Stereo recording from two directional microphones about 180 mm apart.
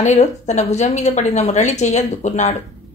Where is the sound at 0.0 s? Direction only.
40° left (ahead or behind).